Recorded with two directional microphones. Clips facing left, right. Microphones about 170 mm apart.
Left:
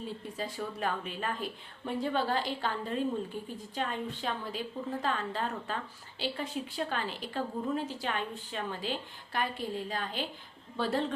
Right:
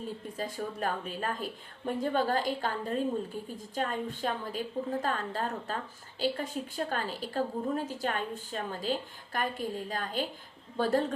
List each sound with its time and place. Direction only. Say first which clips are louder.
0.3 s a woman's voice: right 2 dB; 45° right (ahead or behind)